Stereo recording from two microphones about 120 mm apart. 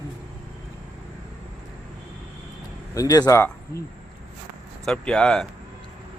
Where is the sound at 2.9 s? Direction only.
30° left (ahead or behind).